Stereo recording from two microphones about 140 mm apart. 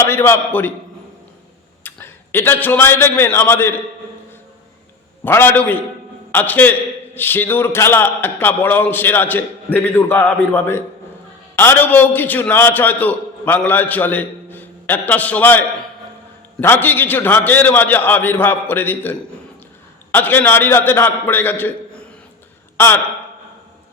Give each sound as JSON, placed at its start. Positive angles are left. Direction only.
{"t": 0.0, "sound": "a man's voice", "side_deg": 15}
{"t": 1.8, "sound": "a man's voice", "side_deg": 15}
{"t": 5.2, "sound": "a man's voice", "side_deg": 15}